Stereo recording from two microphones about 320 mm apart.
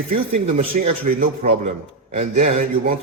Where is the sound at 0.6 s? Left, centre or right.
Right.